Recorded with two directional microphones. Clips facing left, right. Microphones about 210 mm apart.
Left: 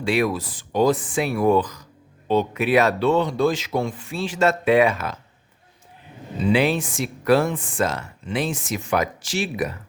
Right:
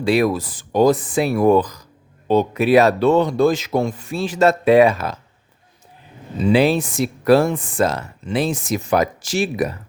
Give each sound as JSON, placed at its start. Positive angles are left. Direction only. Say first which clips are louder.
{"t": 0.0, "sound": "speech", "louder": "right 4 dB", "side_deg": -35}
{"t": 6.4, "sound": "speech", "louder": "right 4 dB", "side_deg": -35}